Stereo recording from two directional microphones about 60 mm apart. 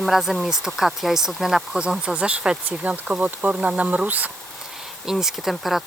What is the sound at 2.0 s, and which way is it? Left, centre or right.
Speech, centre.